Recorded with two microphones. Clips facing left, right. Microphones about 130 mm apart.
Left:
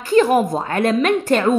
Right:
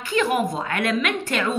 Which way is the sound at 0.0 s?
40° left (ahead or behind).